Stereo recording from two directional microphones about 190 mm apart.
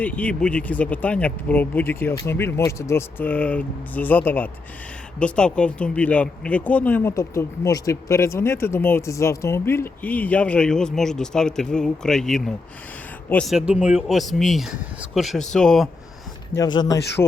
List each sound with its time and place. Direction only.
0.0 s speech: 10° left (ahead or behind)
16.6 s speech: 20° left (ahead or behind)